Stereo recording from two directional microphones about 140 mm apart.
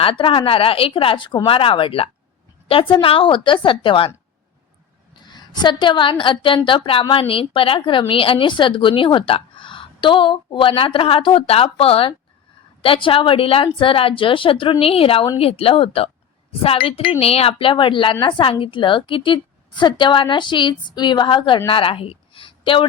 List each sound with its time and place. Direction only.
0.0 s a woman's voice: 40° left (ahead or behind)
5.2 s a woman's voice: 30° left (ahead or behind)